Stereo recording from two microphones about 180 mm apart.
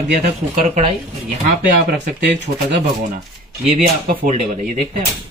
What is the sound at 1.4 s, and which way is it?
Speech, 60° right (ahead or behind).